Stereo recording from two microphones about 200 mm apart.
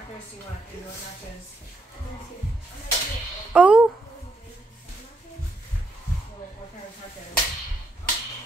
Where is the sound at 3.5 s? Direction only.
5° right (ahead or behind).